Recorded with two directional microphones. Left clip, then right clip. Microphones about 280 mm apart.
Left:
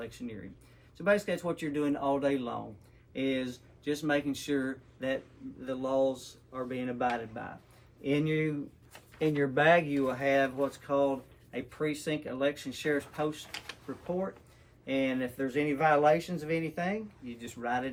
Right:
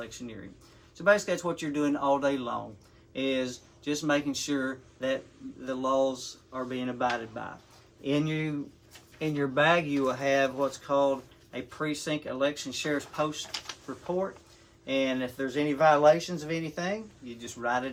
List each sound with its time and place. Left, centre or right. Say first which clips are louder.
1.0 s speech: right 4 dB; centre
14.8 s speech: right 3 dB; centre